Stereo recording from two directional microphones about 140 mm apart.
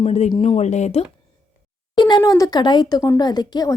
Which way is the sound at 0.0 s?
50° left (ahead or behind).